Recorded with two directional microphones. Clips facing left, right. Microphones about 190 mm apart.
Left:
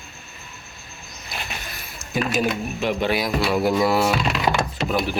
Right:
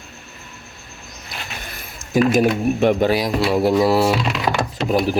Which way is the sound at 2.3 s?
55° right (ahead or behind).